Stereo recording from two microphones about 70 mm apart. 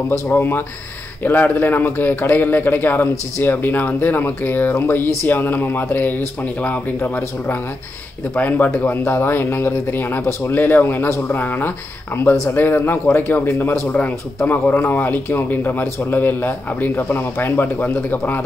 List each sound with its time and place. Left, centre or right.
0.3 s a man's voice: left